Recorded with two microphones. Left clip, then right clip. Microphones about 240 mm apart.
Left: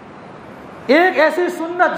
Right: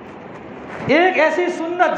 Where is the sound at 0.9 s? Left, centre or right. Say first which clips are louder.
Left 2 dB; left.